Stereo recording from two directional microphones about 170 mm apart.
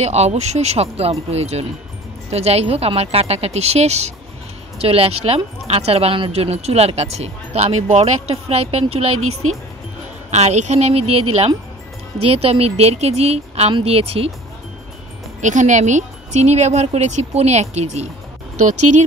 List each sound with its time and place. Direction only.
0.0 s speech: 40° right (ahead or behind)
10.3 s speech: 40° right (ahead or behind)
15.4 s speech: 45° right (ahead or behind)